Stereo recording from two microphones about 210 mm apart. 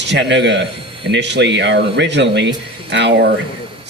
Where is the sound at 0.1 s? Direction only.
55° right (ahead or behind).